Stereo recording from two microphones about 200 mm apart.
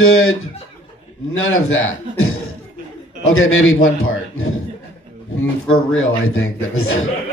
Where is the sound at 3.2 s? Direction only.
90° left.